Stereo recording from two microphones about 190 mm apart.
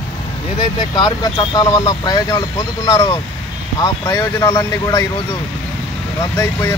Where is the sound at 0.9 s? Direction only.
25° left (ahead or behind).